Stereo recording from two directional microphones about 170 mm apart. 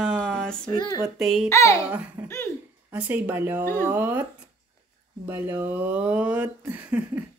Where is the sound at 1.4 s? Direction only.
15° left (ahead or behind).